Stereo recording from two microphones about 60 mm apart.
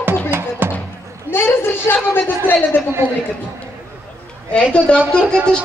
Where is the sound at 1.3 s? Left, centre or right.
Left.